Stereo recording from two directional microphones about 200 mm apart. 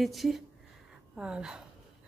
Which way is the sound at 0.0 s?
Centre (ahead or behind).